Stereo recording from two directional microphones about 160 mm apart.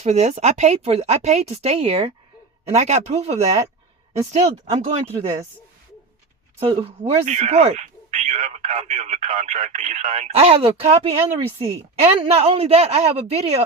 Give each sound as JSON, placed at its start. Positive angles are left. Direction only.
{"t": 0.0, "sound": "speech", "side_deg": -45}
{"t": 6.6, "sound": "speech", "side_deg": -35}